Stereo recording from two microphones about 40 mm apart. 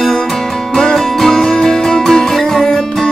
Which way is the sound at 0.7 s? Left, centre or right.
Centre.